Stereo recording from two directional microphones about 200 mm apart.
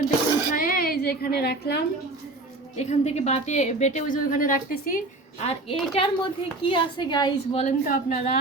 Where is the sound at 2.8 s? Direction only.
35° left (ahead or behind).